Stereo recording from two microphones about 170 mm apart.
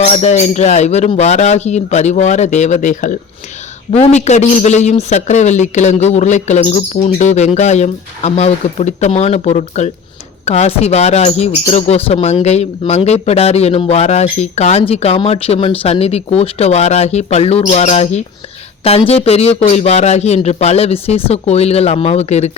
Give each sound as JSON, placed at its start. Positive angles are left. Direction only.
{"t": 0.0, "sound": "a man's voice", "side_deg": 40}